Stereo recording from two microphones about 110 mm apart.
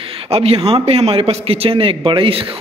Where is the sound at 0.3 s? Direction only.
65° right (ahead or behind).